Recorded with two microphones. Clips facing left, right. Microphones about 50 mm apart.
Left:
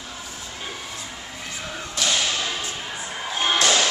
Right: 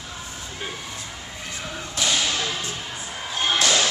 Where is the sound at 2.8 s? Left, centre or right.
Centre.